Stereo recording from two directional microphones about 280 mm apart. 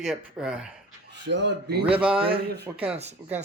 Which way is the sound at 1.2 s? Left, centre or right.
Right.